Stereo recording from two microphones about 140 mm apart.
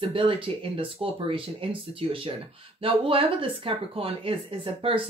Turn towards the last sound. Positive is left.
turn(degrees=-40)  # may be behind; listen again after turning